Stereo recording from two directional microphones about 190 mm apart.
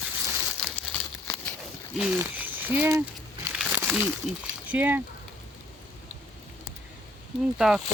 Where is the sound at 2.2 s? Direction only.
10° right (ahead or behind).